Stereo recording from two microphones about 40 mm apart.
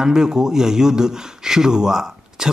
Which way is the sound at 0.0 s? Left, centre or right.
Centre.